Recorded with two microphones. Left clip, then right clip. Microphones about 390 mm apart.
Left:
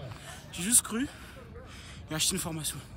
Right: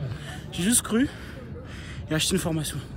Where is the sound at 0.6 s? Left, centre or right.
Centre.